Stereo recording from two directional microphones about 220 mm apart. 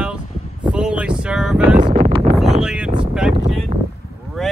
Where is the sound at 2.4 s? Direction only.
Centre (ahead or behind).